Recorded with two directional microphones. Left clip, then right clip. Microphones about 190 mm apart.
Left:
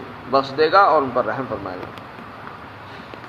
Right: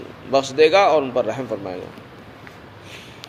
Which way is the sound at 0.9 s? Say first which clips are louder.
Left 1 dB; 55° right (ahead or behind).